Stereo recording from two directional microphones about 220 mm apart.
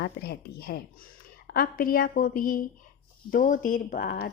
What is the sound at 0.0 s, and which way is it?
A woman's voice, 45° left (ahead or behind).